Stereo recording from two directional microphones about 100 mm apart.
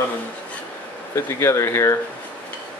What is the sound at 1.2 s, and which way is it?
Speech, 30° left (ahead or behind).